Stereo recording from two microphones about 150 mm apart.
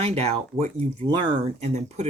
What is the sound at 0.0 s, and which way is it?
Speech, 45° right (ahead or behind).